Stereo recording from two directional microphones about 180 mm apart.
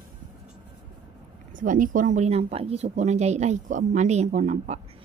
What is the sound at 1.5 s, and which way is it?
Speech, 45° right (ahead or behind).